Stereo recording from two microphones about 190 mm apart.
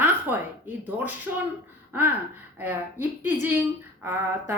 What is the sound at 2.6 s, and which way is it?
A woman's voice, 10° right (ahead or behind).